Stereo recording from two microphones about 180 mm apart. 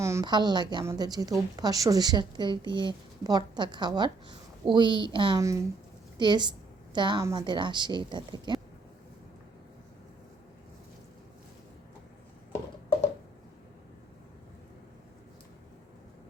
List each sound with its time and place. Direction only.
0.0 s a woman's voice: 15° right (ahead or behind)